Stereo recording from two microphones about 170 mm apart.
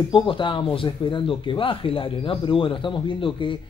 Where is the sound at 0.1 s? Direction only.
30° left (ahead or behind).